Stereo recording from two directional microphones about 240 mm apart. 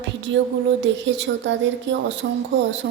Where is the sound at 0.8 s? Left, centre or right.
Right.